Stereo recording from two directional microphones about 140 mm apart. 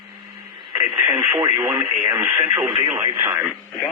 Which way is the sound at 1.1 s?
25° right (ahead or behind).